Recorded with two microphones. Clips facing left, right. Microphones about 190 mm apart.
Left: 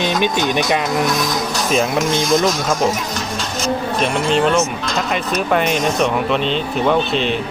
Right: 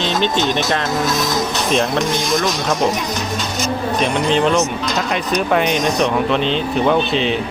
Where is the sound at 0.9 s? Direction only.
25° right (ahead or behind).